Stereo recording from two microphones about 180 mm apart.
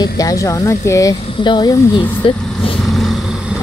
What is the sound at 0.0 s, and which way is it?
Speech, 20° left (ahead or behind).